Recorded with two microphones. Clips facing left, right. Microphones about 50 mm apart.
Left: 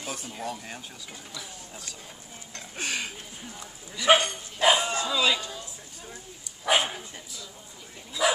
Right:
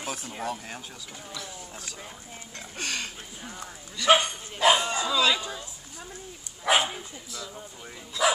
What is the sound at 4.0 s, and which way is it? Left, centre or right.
Speech, centre.